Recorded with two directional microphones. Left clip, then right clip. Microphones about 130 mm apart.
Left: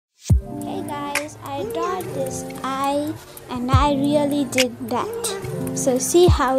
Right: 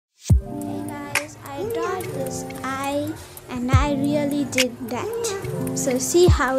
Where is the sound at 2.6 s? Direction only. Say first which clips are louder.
Left 4 dB; 20° left (ahead or behind).